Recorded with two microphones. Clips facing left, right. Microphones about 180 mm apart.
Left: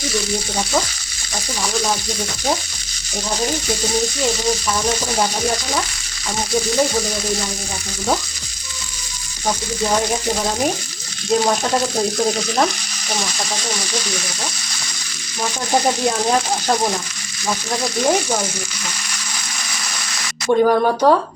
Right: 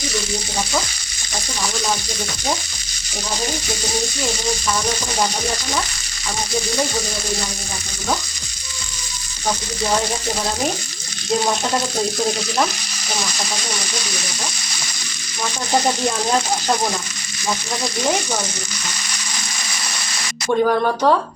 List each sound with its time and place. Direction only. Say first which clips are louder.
20.5 s speech: left 3 dB; 10° left (ahead or behind)